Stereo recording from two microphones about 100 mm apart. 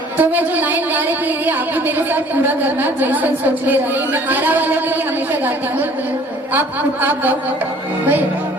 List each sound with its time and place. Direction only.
0.2 s a woman's voice: 15° right (ahead or behind)
7.0 s a woman's voice: 20° right (ahead or behind)